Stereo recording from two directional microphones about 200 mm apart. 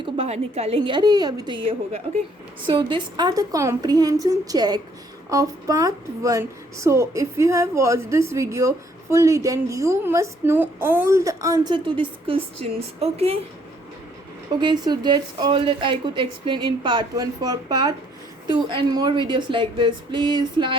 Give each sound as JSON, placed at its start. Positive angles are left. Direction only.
{"t": 0.0, "sound": "a woman's voice", "side_deg": -30}
{"t": 14.6, "sound": "a woman's voice", "side_deg": -20}